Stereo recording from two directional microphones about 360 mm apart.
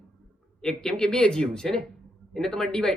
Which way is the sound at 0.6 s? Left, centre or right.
Centre.